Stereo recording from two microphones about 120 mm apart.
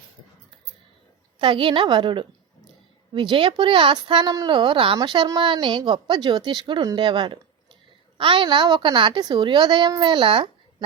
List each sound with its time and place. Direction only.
1.4 s a woman's voice: 45° right (ahead or behind)